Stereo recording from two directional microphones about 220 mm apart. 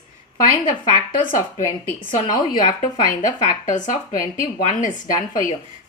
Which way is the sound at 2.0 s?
40° left (ahead or behind).